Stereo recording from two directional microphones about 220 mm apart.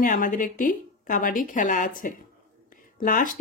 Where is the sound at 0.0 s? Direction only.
40° left (ahead or behind).